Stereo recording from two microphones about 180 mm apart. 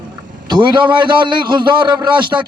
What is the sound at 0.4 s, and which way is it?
A man's voice, 25° right (ahead or behind).